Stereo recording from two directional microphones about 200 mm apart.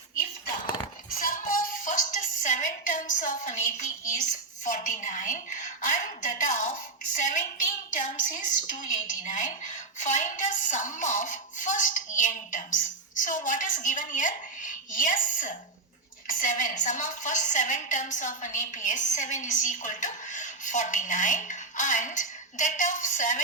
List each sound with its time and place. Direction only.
1.2 s music: 40° left (ahead or behind)
4.0 s a woman's voice: 40° left (ahead or behind)
8.8 s a woman's voice: 40° left (ahead or behind)